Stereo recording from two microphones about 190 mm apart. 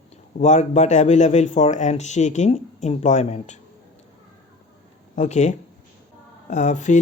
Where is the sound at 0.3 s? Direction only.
40° left (ahead or behind).